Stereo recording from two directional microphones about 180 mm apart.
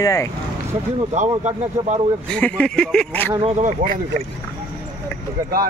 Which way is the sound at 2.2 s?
5° left (ahead or behind).